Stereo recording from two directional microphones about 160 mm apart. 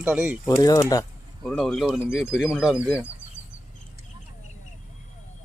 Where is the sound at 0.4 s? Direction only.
20° left (ahead or behind).